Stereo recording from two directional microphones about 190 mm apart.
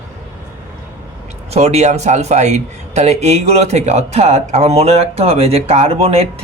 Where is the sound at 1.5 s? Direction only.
35° right (ahead or behind).